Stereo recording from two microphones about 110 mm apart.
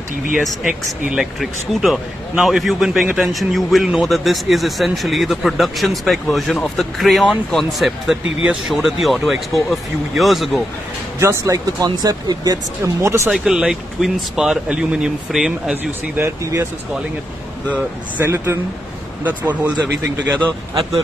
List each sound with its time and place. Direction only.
0.5 s speech: 5° right (ahead or behind)
11.1 s speech: 25° right (ahead or behind)
13.3 s speech: 5° right (ahead or behind)
15.7 s speech: 25° right (ahead or behind)
18.1 s speech: 20° right (ahead or behind)